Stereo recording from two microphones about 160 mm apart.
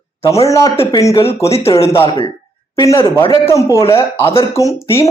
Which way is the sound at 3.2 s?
35° left (ahead or behind).